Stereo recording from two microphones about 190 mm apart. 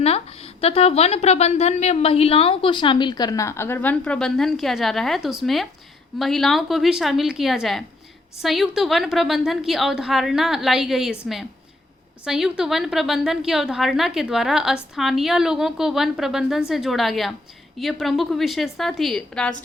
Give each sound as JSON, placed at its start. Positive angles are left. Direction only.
{"t": 0.0, "sound": "a woman's voice", "side_deg": 30}
{"t": 12.2, "sound": "a woman's voice", "side_deg": -5}